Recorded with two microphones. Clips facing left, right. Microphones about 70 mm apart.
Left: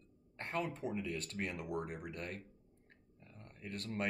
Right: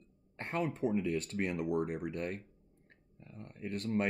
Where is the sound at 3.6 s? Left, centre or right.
Right.